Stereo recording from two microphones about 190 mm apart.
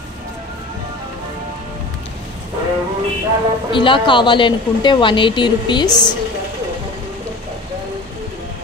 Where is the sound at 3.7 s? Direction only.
25° left (ahead or behind).